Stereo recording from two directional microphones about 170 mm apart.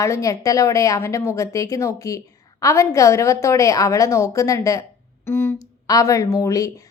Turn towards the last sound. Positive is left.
turn(degrees=20)  # may be behind; listen again after turning